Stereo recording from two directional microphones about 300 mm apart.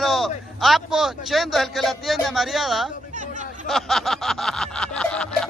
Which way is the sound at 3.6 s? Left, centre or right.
Centre.